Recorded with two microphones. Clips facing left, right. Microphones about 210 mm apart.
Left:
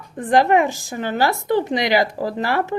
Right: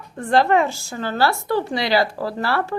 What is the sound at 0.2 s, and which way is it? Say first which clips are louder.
Speech: left 1 dB; 15° left (ahead or behind).